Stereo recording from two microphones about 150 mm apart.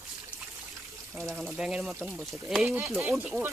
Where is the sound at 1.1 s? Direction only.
Centre (ahead or behind).